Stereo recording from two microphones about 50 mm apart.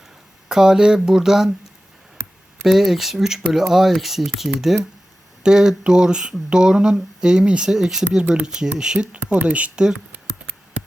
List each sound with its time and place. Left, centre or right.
0.4 s speech: centre
2.6 s speech: centre
8.2 s speech: right
8.4 s speech: centre
9.1 s speech: right